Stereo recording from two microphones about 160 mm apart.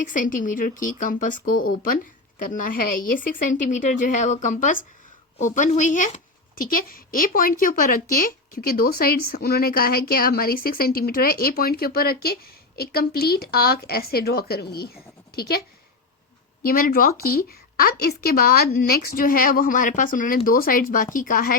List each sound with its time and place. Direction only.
0.1 s a woman's voice: 55° left (ahead or behind); by 15.6 s 75° left (ahead or behind)
16.6 s a woman's voice: 65° left (ahead or behind)